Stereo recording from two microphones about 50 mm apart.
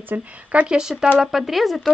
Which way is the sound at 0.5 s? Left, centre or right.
Centre.